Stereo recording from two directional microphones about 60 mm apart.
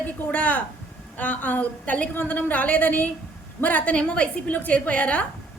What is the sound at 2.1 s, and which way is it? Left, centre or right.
A woman's voice, left.